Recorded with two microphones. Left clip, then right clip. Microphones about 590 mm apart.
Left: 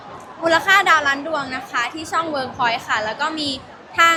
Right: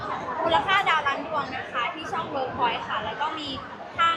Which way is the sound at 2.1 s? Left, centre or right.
Left.